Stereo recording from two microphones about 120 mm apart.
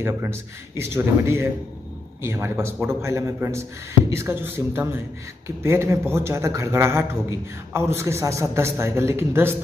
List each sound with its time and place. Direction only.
0.0 s a man's voice: 20° right (ahead or behind)